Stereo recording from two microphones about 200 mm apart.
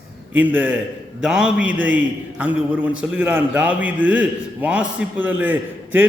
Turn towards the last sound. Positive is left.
turn(degrees=-10)  # may be behind; listen again after turning